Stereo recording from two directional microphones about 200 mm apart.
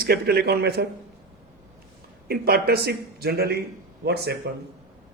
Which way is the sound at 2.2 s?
50° right (ahead or behind).